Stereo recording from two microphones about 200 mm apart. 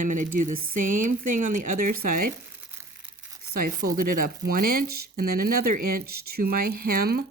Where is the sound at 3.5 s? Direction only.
45° right (ahead or behind).